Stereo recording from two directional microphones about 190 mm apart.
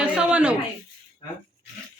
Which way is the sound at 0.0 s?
5° right (ahead or behind).